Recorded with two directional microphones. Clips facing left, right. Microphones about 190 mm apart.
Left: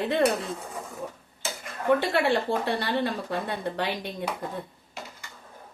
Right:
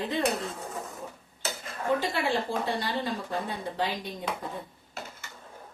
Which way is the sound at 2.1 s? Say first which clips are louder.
Left 5 dB; 70° left (ahead or behind).